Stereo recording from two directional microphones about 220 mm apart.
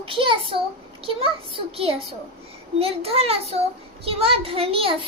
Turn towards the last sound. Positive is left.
turn(degrees=-25)  # may be behind; listen again after turning